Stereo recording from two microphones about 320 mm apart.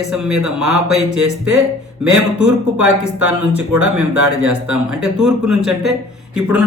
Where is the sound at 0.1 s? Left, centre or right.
Centre.